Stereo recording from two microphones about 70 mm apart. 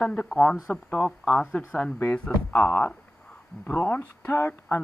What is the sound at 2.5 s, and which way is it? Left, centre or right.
Speech, left.